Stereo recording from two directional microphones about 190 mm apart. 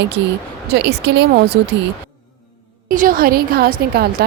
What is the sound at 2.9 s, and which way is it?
Speech, 45° right (ahead or behind).